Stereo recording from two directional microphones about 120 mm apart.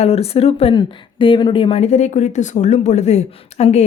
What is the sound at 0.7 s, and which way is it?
Speech, 45° left (ahead or behind).